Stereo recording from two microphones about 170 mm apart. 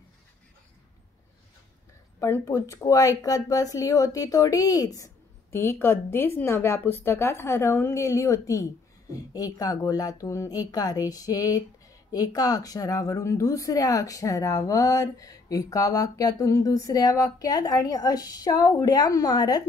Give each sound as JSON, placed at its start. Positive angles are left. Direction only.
{"t": 2.1, "sound": "speech", "side_deg": 15}